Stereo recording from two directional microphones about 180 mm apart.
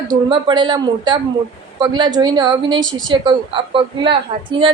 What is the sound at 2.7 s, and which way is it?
Speech, 90° right.